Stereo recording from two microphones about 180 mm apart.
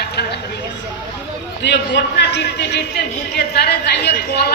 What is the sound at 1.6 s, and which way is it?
A man's voice, 75° left (ahead or behind).